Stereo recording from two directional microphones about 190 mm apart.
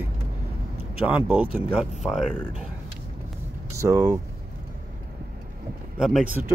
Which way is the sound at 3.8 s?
15° right (ahead or behind).